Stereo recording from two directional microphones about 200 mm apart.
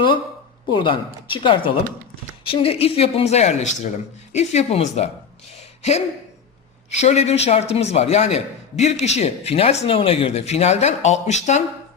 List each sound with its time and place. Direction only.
0.7 s a man's voice: 25° left (ahead or behind)
5.5 s a sound: 35° left (ahead or behind)
6.9 s a man's voice: 35° left (ahead or behind)